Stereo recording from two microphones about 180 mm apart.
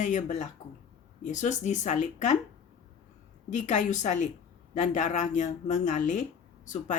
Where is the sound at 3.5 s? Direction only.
40° left (ahead or behind).